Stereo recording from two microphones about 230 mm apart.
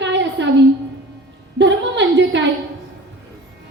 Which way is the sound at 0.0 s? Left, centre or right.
Right.